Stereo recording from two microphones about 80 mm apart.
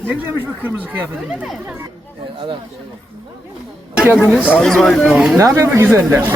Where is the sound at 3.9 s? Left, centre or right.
Centre.